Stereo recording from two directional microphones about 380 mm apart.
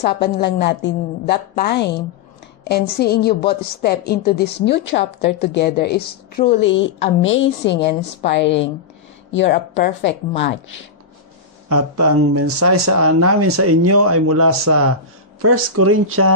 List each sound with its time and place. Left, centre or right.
0.0 s a woman's voice: left
11.7 s speech: right